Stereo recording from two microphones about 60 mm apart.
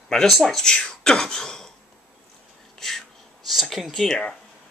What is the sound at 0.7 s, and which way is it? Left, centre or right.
Throat clearing, centre.